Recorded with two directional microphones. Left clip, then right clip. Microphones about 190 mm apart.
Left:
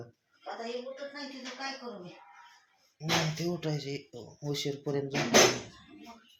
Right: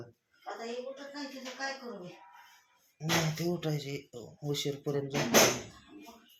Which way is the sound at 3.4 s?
10° left (ahead or behind).